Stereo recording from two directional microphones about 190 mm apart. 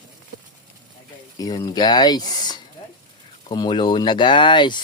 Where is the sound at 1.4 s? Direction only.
20° left (ahead or behind).